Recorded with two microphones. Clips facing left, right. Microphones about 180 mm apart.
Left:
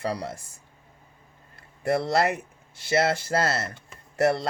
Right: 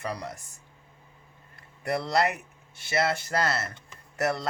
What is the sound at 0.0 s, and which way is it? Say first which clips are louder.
Speech: left 4 dB; 30° left (ahead or behind).